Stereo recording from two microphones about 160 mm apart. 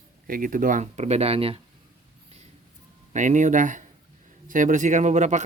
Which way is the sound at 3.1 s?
50° right (ahead or behind).